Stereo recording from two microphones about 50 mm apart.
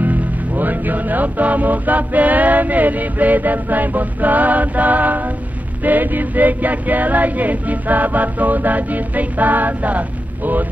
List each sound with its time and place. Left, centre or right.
0.0 s music: right